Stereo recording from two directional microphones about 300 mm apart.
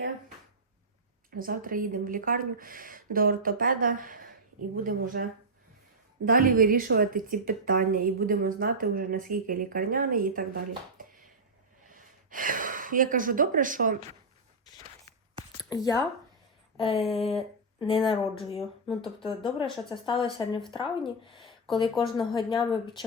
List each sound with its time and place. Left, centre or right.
1.3 s a woman's voice: right
6.2 s a woman's voice: right
14.8 s walk: right
15.7 s speech: centre
16.7 s a sound: centre
17.7 s speech: centre
21.2 s a sound: centre
22.4 s speech: centre